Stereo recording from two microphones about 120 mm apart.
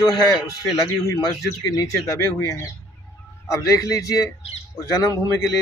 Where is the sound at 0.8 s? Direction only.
25° left (ahead or behind).